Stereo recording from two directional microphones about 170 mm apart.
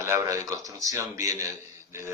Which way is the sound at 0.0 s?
15° right (ahead or behind).